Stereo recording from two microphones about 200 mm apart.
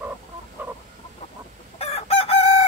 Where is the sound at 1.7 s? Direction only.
30° left (ahead or behind).